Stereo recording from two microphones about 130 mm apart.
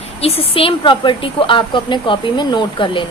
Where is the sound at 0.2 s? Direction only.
50° left (ahead or behind).